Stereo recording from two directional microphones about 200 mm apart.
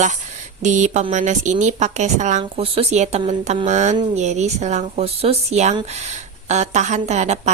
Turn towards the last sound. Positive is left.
turn(degrees=-35)  # may be behind; listen again after turning